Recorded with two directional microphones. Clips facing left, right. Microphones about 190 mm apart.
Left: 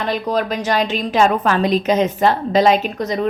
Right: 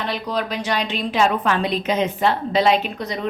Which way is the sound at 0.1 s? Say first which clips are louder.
Left 5 dB; 45° left (ahead or behind).